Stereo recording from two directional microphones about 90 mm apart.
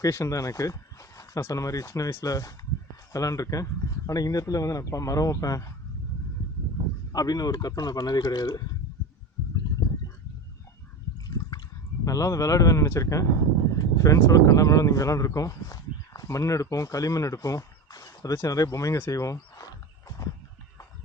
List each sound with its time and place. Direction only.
0.0 s speech: 35° left (ahead or behind)
7.1 s a man's voice: 45° left (ahead or behind)
11.3 s water: 45° left (ahead or behind)
12.0 s speech: 40° left (ahead or behind)